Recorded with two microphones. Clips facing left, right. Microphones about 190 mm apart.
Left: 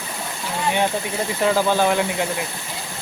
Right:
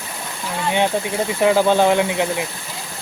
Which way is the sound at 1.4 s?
15° right (ahead or behind).